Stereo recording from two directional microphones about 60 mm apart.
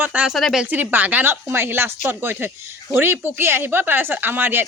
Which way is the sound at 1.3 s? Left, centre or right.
Right.